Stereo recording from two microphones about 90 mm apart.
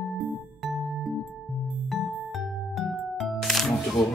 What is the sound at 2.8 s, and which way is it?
Music, 15° right (ahead or behind).